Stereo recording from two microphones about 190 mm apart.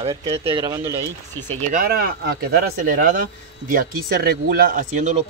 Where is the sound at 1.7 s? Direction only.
50° right (ahead or behind).